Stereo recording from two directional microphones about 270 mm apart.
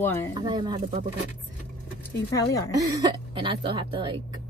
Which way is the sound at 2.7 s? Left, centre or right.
Centre.